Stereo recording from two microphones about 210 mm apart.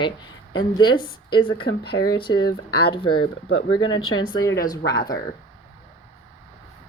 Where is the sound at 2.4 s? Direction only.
50° left (ahead or behind).